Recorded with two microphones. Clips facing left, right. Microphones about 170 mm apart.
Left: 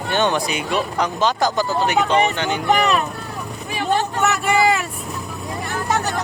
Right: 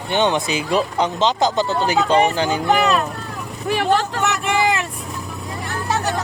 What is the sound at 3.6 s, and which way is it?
Speech, 90° right.